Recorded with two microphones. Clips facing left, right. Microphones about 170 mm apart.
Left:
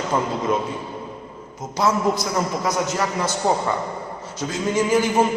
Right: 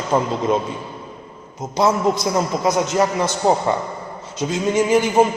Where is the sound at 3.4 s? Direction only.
20° right (ahead or behind).